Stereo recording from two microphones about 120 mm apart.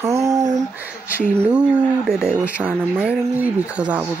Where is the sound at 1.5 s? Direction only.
5° right (ahead or behind).